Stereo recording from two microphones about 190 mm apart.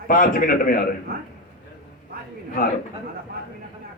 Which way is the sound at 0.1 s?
45° left (ahead or behind).